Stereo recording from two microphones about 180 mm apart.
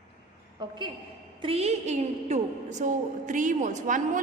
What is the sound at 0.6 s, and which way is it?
A woman's voice, 25° right (ahead or behind).